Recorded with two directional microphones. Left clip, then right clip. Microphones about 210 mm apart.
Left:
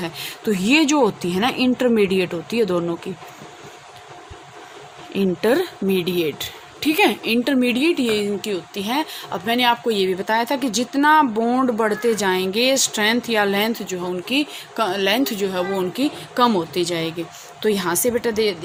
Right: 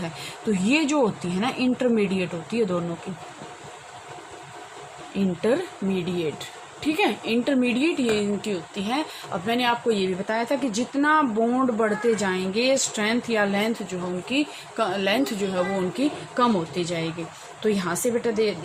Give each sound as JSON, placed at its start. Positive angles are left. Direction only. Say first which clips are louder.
{"t": 0.0, "sound": "speech", "louder": "left 5 dB", "side_deg": 55}
{"t": 5.1, "sound": "speech", "louder": "left 5 dB", "side_deg": 55}